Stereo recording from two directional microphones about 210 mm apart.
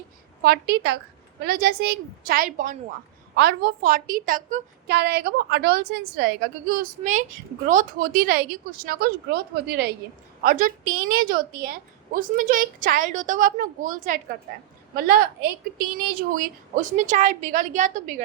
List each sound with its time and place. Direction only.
0.4 s a woman's voice: 50° right (ahead or behind)